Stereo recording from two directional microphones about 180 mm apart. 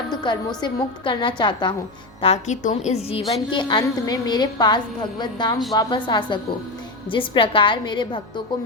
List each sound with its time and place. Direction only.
0.1 s a woman's voice: 25° left (ahead or behind)
2.2 s a woman's voice: 40° left (ahead or behind)